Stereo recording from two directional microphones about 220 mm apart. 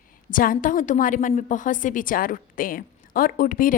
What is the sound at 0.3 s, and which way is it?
Speech, 40° left (ahead or behind).